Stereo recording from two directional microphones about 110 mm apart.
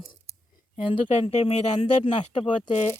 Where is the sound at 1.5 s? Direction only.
90° left.